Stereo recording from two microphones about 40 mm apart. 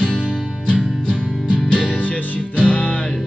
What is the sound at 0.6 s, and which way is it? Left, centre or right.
Music, left.